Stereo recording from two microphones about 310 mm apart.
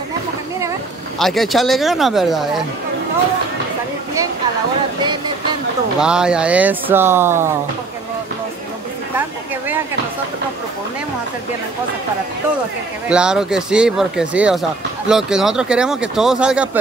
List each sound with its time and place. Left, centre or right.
1.2 s speech: centre
5.9 s speech: centre
13.1 s speech: centre